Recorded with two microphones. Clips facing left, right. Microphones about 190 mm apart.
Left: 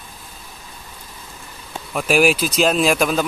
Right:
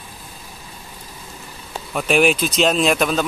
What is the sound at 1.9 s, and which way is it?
Speech, 5° left (ahead or behind).